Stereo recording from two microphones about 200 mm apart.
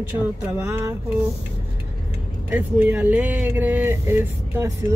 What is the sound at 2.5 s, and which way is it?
Speech, 10° right (ahead or behind).